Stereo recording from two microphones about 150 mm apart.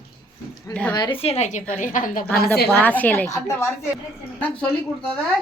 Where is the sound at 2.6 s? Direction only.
10° left (ahead or behind).